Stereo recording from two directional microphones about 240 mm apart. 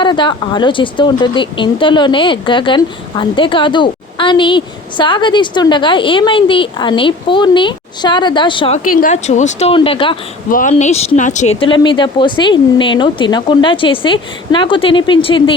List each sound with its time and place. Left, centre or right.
0.0 s speech: centre
8.9 s speech: left
10.5 s speech: left